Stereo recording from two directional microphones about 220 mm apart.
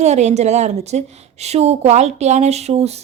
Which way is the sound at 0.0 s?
30° right (ahead or behind).